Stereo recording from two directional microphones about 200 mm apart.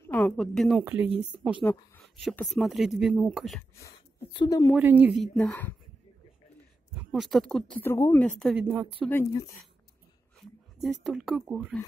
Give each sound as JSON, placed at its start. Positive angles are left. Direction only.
{"t": 0.0, "sound": "speech", "side_deg": 5}
{"t": 0.8, "sound": "a woman's voice", "side_deg": -10}
{"t": 4.3, "sound": "speech", "side_deg": 20}
{"t": 4.7, "sound": "a woman's voice", "side_deg": -10}
{"t": 7.0, "sound": "a woman's voice", "side_deg": 0}
{"t": 8.5, "sound": "speech", "side_deg": -10}
{"t": 9.0, "sound": "speech", "side_deg": 10}
{"t": 10.8, "sound": "a woman's voice", "side_deg": 0}